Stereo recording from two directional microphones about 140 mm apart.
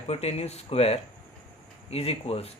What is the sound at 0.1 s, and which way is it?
Speech, 50° left (ahead or behind).